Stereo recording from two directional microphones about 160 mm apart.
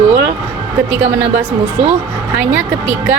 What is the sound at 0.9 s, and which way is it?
Speech, 10° right (ahead or behind).